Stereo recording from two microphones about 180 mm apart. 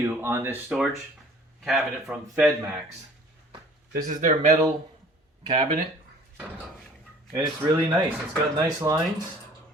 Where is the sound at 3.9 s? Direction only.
50° right (ahead or behind).